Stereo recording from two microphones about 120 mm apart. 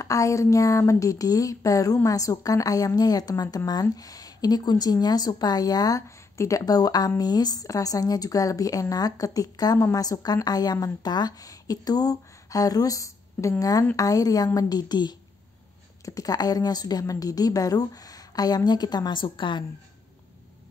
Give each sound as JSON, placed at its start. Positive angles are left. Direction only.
{"t": 0.0, "sound": "a woman's voice", "side_deg": 25}
{"t": 16.2, "sound": "a woman's voice", "side_deg": 30}